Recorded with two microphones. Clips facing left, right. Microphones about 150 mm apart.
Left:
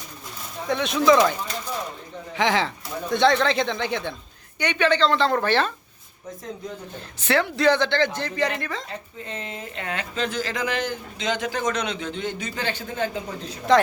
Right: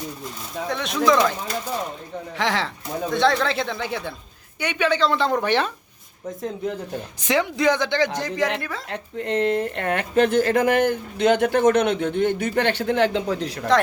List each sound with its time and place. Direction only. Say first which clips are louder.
0.7 s speech: left 2 dB; centre (ahead or behind)
7.2 s speech: even; 15° right (ahead or behind)
8.9 s speech: right 9 dB; 70° right (ahead or behind)